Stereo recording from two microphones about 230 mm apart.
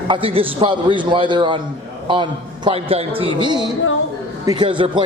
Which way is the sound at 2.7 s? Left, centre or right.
Right.